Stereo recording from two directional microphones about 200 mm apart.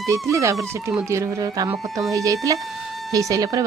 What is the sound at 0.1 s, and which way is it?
Speech, 15° right (ahead or behind).